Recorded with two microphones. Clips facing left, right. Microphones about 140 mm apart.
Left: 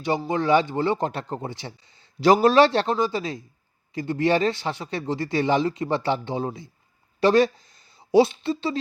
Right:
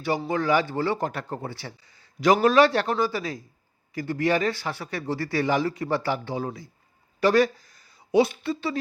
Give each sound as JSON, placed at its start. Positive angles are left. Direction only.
{"t": 0.3, "sound": "speech", "side_deg": 25}